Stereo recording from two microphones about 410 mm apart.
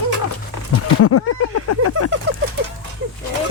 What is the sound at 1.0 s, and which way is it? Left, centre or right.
Speech, left.